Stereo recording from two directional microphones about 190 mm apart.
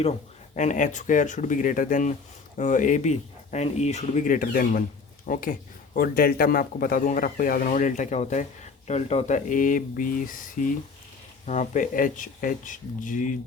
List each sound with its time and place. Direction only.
0.5 s speech: 40° left (ahead or behind)